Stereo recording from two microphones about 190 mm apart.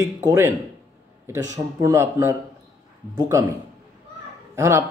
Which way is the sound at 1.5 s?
15° right (ahead or behind).